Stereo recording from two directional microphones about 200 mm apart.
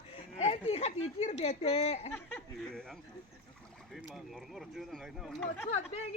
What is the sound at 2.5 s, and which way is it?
Speech, centre (ahead or behind).